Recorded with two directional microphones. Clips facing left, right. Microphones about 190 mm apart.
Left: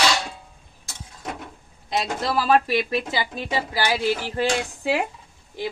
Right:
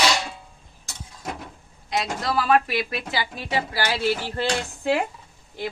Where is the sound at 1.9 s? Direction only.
30° left (ahead or behind); by 4.4 s 15° left (ahead or behind).